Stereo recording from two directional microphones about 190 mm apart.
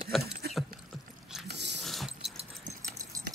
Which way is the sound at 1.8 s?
Centre (ahead or behind).